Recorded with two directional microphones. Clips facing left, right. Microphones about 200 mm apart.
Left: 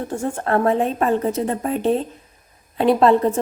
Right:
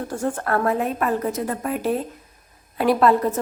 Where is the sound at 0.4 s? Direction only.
25° left (ahead or behind).